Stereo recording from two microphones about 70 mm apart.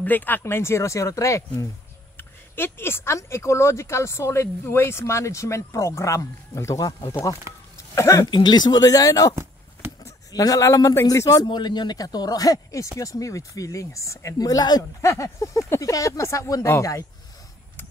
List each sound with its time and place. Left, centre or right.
0.0 s speech: left
2.1 s speech: left
6.9 s speech: left
7.7 s a sound: left
8.4 s speech: left
9.3 s a sound: right
10.3 s speech: left
11.2 s speech: left
15.0 s speech: left
16.6 s speech: left